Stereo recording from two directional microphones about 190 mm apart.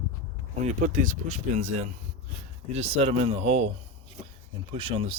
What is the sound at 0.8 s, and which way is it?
Speech, 45° right (ahead or behind).